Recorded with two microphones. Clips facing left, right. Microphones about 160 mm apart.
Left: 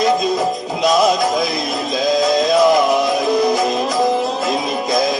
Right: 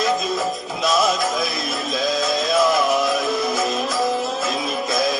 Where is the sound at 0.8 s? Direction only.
20° left (ahead or behind).